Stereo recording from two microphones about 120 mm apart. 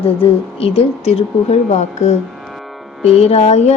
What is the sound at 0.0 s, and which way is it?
Speech, 55° left (ahead or behind).